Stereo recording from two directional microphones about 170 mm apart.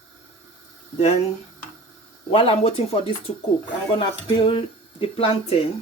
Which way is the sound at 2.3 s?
35° left (ahead or behind).